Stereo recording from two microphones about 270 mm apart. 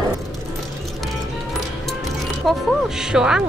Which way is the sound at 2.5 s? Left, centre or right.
Centre.